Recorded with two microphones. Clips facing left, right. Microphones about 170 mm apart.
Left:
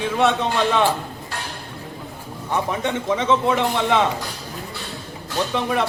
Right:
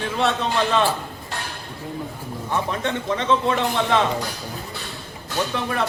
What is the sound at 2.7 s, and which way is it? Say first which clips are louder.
Speech: left 2 dB; 10° left (ahead or behind).